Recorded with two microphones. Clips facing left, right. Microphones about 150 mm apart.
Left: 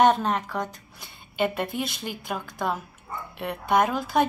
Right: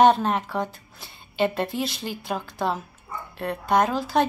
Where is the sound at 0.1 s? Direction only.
5° right (ahead or behind).